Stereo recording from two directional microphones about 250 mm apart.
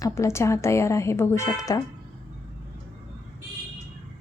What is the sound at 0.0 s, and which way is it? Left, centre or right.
A woman's voice, centre.